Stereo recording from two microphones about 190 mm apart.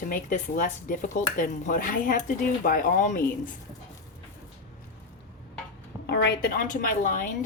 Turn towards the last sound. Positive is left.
turn(degrees=45)  # may be behind; listen again after turning